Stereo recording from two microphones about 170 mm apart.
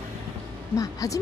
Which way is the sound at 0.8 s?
20° left (ahead or behind).